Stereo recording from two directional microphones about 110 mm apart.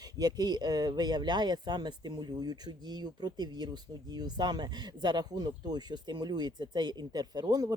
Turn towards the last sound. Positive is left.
turn(degrees=-35)  # may be behind; listen again after turning